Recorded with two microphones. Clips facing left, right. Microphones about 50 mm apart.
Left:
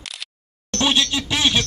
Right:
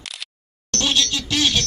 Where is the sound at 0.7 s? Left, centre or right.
Centre.